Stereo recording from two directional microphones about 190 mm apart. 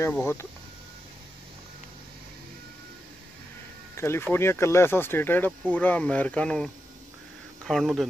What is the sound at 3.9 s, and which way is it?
Speech, 15° left (ahead or behind).